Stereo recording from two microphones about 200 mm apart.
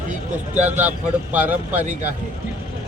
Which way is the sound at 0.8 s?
10° right (ahead or behind).